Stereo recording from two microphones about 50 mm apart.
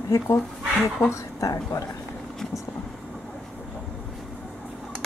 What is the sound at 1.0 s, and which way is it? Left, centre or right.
Speech, left.